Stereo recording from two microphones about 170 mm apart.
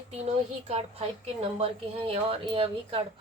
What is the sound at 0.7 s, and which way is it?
Speech, 40° right (ahead or behind).